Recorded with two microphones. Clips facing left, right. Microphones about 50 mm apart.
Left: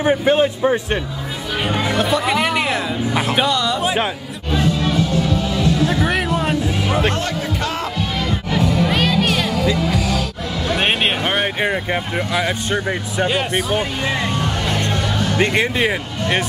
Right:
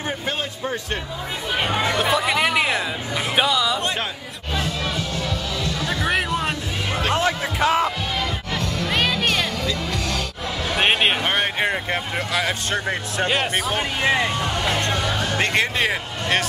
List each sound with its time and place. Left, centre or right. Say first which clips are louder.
0.0 s speech: left 12 dB; left
1.7 s speech: left 3 dB; centre
4.5 s music: left 7 dB; centre
7.2 s music: right 1 dB; centre
8.5 s music: left 6 dB; centre
10.7 s speech: left 1 dB; centre
14.0 s speech: right 2 dB; centre
14.9 s music: left 2 dB; centre
15.4 s speech: left 3 dB; centre